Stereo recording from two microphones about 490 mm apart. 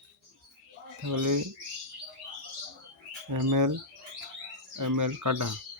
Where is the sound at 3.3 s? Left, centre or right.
Right.